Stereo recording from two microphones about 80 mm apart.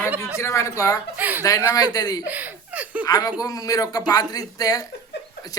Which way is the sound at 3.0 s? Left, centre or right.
Left.